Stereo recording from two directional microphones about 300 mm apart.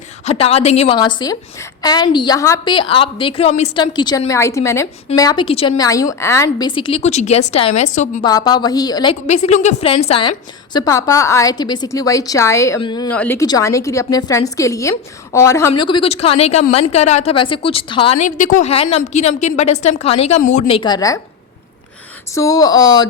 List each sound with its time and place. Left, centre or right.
0.3 s a woman's voice: centre
8.3 s a woman's voice: centre
22.4 s a woman's voice: centre